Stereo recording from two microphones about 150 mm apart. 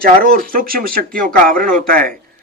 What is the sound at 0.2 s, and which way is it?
A man's voice, 75° right (ahead or behind).